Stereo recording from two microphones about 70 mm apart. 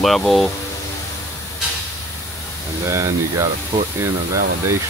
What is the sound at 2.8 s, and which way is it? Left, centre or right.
Speech, right.